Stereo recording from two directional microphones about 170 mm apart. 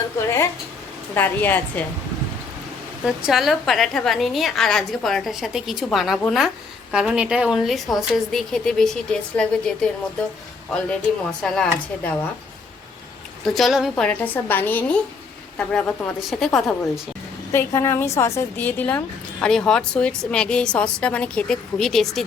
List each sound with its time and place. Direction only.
0.2 s a sound: 15° left (ahead or behind)
1.1 s a woman's voice: 10° left (ahead or behind)
3.0 s a woman's voice: 5° right (ahead or behind)
13.4 s a woman's voice: centre (ahead or behind)
17.5 s a woman's voice: 15° left (ahead or behind)